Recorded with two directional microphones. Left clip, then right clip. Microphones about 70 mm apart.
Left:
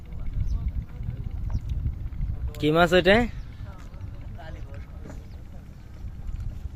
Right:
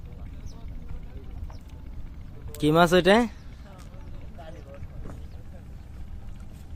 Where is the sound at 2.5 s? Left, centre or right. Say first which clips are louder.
Even; right.